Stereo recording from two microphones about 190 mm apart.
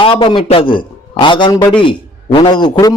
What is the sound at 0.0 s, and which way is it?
A man's voice, 25° left (ahead or behind).